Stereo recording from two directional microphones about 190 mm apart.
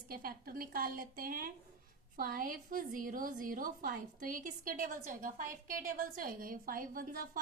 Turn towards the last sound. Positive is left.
turn(degrees=-45)  # may be behind; listen again after turning